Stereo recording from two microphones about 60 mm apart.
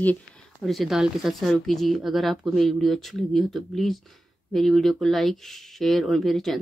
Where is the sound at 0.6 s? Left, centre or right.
Centre.